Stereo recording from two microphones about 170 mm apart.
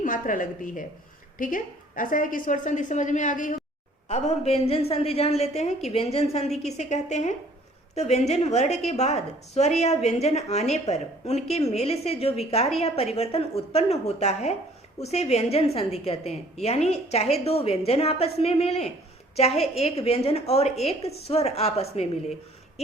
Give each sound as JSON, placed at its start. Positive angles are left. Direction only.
{"t": 0.0, "sound": "a woman's voice", "side_deg": 50}